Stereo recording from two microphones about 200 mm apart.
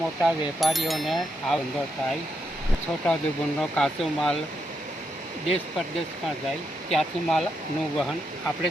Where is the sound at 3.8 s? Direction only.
5° left (ahead or behind).